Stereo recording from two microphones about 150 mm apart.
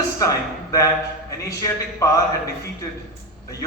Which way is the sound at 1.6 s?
20° left (ahead or behind).